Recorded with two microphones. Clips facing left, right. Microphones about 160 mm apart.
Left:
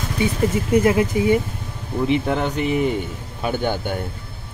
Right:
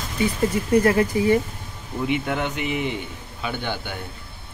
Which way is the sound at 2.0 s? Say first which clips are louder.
Left 4 dB; 35° left (ahead or behind).